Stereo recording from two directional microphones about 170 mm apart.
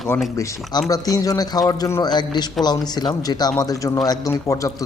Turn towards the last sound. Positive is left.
turn(degrees=20)  # may be behind; listen again after turning